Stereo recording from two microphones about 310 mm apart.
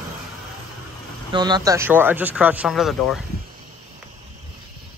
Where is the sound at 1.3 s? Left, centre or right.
Centre.